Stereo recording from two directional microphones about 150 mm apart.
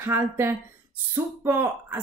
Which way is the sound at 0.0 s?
15° right (ahead or behind).